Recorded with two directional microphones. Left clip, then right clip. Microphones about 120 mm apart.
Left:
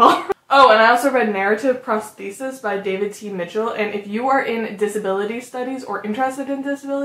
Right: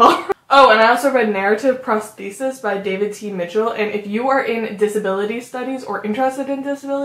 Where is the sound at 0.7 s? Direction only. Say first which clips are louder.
Right 1 dB; centre (ahead or behind).